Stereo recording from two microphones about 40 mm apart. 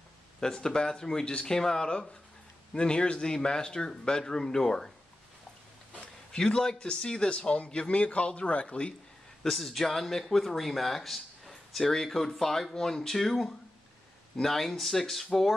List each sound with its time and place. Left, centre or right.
0.4 s speech: centre
6.3 s speech: centre
9.4 s speech: centre